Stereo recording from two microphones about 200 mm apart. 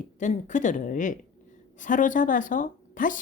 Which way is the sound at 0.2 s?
40° left (ahead or behind).